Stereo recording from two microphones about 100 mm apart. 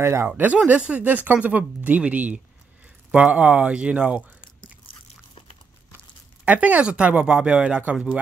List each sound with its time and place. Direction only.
0.0 s speech: 25° right (ahead or behind)
0.4 s speech: 15° right (ahead or behind)
6.4 s speech: 15° right (ahead or behind)